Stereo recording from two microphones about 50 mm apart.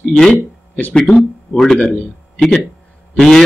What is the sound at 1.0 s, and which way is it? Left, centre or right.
Speech, centre.